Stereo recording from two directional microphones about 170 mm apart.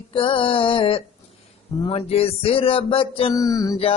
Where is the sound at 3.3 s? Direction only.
20° left (ahead or behind).